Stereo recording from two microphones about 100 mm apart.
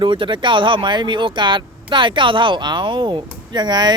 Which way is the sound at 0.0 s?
55° right (ahead or behind).